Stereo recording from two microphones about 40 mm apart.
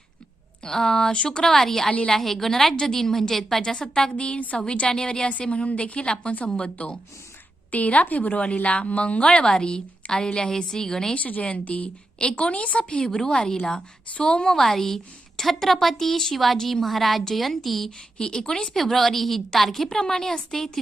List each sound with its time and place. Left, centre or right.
0.6 s a woman's voice: centre
1.5 s a woman's voice: centre
4.1 s a woman's voice: left
4.5 s a woman's voice: left
5.3 s a woman's voice: left
9.2 s a woman's voice: left
11.1 s a woman's voice: left; by 14.6 s centre
14.6 s a woman's voice: centre
18.2 s a woman's voice: left
18.7 s a woman's voice: centre